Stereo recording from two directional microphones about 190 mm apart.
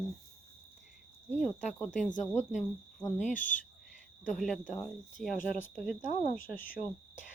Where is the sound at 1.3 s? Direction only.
Centre (ahead or behind).